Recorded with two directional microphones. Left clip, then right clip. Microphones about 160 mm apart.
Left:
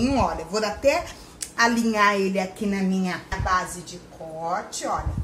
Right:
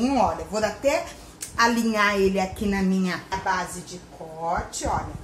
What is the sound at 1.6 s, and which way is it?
A woman's voice, 10° left (ahead or behind).